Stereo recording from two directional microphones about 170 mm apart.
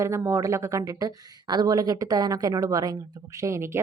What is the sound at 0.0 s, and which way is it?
Speech, 15° right (ahead or behind).